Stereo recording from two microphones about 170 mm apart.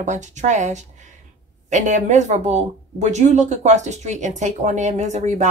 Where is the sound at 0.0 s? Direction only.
45° right (ahead or behind).